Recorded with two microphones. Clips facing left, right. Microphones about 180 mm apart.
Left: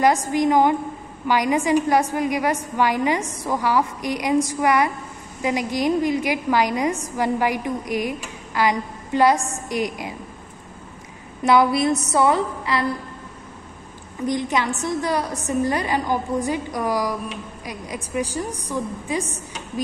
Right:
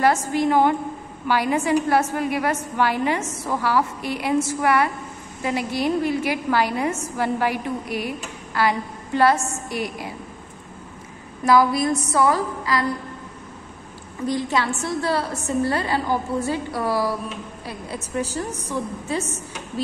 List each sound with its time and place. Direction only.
0.0 s a woman's voice: 15° left (ahead or behind)
11.4 s a woman's voice: 25° left (ahead or behind)
14.2 s a woman's voice: 20° left (ahead or behind)